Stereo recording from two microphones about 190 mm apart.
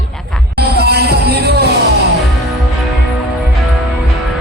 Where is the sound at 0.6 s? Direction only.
60° right (ahead or behind).